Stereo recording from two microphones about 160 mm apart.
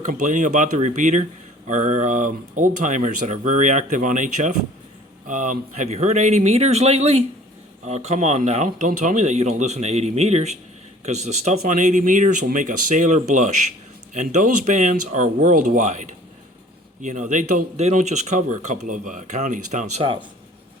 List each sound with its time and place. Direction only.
0.0 s speech: 50° right (ahead or behind)